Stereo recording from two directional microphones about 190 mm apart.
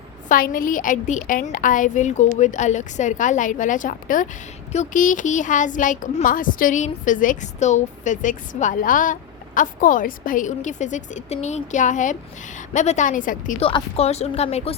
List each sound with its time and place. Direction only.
0.3 s a woman's voice: 50° left (ahead or behind)
13.6 s a woman's voice: 30° left (ahead or behind)